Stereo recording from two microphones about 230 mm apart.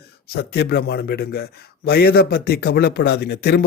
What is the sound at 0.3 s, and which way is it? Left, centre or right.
Speech, left.